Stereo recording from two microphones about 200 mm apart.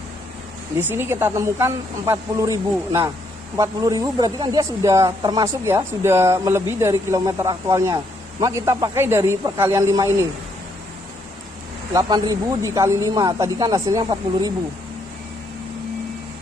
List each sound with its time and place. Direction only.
0.8 s speech: 10° right (ahead or behind)
11.9 s speech: 20° right (ahead or behind)